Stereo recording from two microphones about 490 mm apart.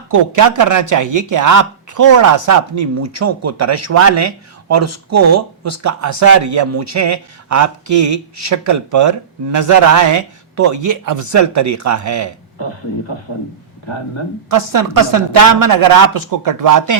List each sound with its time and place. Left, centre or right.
0.1 s speech: right
14.5 s speech: right